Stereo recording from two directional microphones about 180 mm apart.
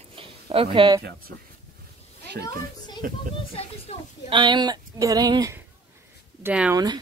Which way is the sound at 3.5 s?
35° left (ahead or behind).